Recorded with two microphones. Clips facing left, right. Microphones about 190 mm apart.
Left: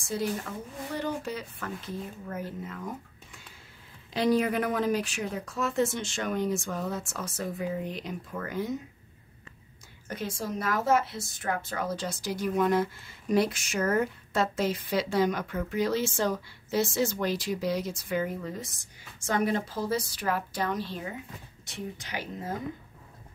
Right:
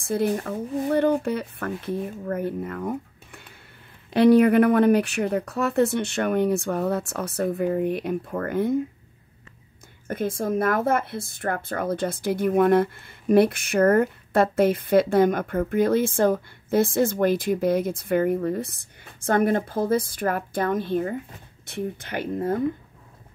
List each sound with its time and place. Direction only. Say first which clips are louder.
0.0 s a woman's voice: right 7 dB; 55° right (ahead or behind)
10.0 s a woman's voice: right 8 dB; 55° right (ahead or behind)